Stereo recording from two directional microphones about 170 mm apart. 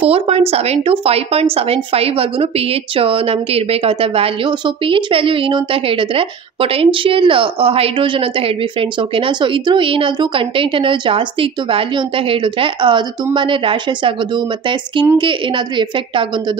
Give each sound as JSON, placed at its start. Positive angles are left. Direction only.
{"t": 0.0, "sound": "a woman's voice", "side_deg": -35}